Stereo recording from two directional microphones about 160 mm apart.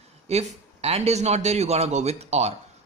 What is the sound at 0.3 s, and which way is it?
A man's voice, 40° right (ahead or behind).